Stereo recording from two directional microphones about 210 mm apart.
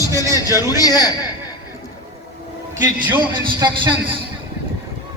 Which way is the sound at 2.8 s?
10° right (ahead or behind).